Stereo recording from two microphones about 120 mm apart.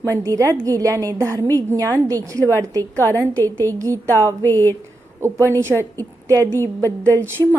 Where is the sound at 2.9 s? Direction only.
20° left (ahead or behind).